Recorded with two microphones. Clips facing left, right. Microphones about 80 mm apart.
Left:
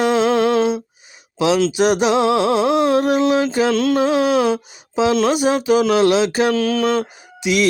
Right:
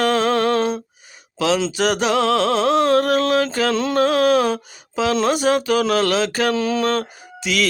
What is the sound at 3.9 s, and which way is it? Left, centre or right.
Mantra, centre.